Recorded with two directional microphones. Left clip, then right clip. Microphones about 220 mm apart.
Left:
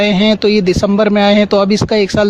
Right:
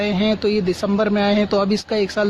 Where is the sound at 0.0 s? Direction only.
40° left (ahead or behind).